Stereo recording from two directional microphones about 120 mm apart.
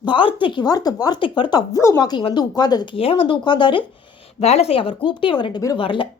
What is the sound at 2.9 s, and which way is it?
Speech, 50° left (ahead or behind).